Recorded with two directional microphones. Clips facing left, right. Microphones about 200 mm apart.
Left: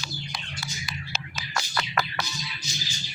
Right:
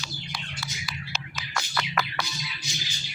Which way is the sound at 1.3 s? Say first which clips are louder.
Left 1 dB; 35° left (ahead or behind).